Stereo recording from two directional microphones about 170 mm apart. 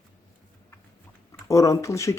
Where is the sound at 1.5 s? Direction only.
20° left (ahead or behind).